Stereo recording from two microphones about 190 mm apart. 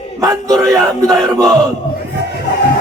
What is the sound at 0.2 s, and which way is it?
Speech, 20° right (ahead or behind).